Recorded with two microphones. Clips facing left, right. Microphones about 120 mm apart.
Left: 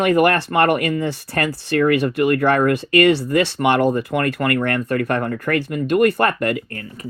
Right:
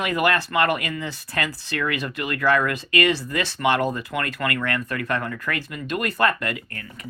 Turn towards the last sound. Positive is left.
turn(degrees=30)  # may be behind; listen again after turning